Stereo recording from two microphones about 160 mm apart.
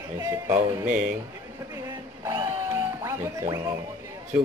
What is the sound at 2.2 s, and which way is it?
Music, 20° right (ahead or behind).